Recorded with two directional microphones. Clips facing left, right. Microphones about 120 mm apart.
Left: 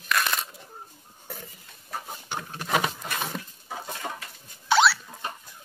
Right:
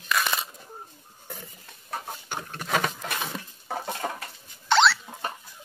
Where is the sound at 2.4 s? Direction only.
5° left (ahead or behind).